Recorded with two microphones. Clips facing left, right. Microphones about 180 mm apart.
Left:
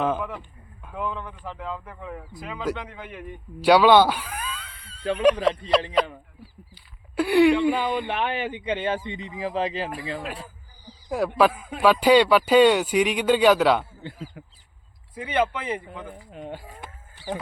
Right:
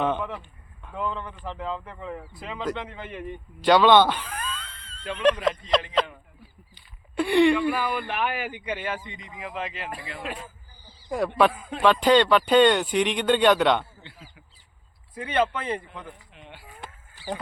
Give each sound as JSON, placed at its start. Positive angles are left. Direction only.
{"t": 0.0, "sound": "a man's voice", "side_deg": 5}
{"t": 11.1, "sound": "speech", "side_deg": 5}
{"t": 14.0, "sound": "a sound", "side_deg": 45}
{"t": 15.1, "sound": "speech", "side_deg": 10}
{"t": 16.1, "sound": "speech", "side_deg": 40}